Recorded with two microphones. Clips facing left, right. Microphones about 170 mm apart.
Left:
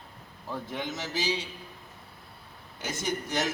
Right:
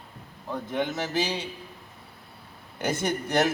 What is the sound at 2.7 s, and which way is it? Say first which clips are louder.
Speech: right 5 dB; 60° right (ahead or behind).